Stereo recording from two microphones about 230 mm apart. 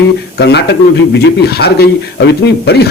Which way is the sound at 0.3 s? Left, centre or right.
Left.